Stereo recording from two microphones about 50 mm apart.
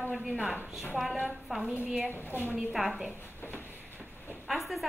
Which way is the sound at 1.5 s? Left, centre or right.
Centre.